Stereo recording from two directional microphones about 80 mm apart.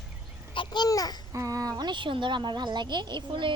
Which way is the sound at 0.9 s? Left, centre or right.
Left.